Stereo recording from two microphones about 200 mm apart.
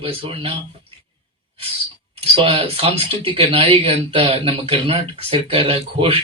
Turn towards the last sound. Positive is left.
turn(degrees=-30)  # may be behind; listen again after turning